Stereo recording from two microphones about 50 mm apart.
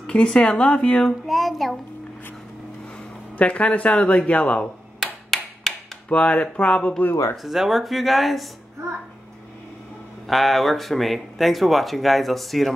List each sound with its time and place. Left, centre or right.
0.0 s speech: centre
1.2 s speech: centre
3.3 s speech: left
5.0 s clapping: centre
6.0 s speech: left
7.4 s speech: centre
10.2 s speech: centre